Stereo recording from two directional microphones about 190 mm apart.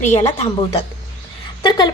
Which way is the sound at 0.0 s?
35° left (ahead or behind).